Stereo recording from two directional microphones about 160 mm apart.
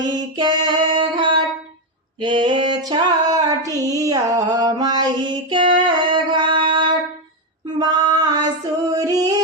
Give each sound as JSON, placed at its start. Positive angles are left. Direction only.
{"t": 0.1, "sound": "music", "side_deg": -30}
{"t": 7.8, "sound": "female singing", "side_deg": -25}
{"t": 8.9, "sound": "singing", "side_deg": -20}